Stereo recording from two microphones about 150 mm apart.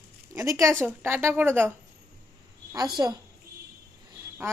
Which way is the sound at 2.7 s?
25° right (ahead or behind).